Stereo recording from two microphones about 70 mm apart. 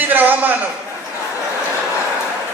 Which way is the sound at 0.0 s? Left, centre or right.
Right.